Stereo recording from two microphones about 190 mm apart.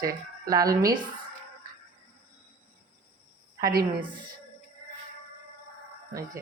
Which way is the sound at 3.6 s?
50° right (ahead or behind).